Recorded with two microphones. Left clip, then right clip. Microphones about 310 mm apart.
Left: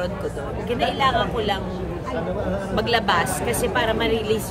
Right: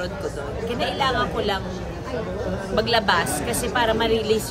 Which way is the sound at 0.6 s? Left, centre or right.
Centre.